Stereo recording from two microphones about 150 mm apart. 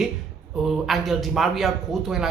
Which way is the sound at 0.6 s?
Centre (ahead or behind).